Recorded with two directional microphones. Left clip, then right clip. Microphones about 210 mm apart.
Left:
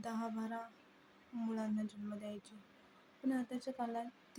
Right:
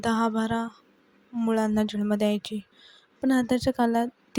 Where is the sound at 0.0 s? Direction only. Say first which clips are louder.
Right 18 dB; 40° right (ahead or behind).